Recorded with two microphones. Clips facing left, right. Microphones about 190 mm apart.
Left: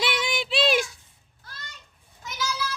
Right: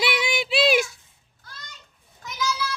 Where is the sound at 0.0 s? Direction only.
5° right (ahead or behind).